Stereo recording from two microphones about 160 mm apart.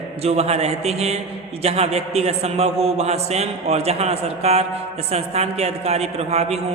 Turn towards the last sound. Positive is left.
turn(degrees=-40)  # may be behind; listen again after turning